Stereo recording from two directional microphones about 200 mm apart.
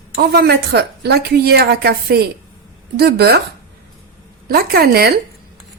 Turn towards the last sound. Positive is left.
turn(degrees=-50)  # may be behind; listen again after turning